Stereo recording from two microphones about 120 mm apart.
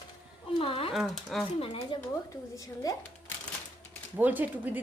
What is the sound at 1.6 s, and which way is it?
Speech, 50° left (ahead or behind).